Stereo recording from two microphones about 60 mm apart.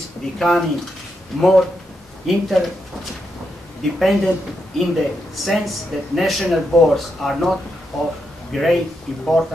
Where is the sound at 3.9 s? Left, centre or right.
Centre.